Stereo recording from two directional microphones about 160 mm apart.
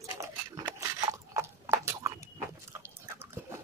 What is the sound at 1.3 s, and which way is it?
Horse, 15° right (ahead or behind).